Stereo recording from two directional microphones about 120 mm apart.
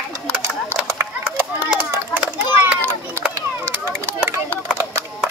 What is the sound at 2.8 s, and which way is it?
Children playing, 20° right (ahead or behind).